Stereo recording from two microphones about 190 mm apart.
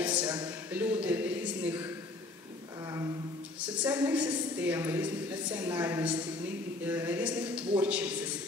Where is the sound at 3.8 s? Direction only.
10° right (ahead or behind).